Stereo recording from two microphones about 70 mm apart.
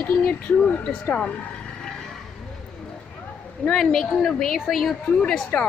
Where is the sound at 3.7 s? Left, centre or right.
Centre.